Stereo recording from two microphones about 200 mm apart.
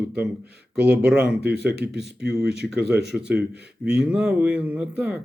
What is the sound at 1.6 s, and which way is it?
Speech, 55° right (ahead or behind).